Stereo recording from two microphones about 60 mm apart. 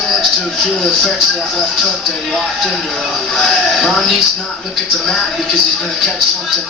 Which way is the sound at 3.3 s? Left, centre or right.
Centre.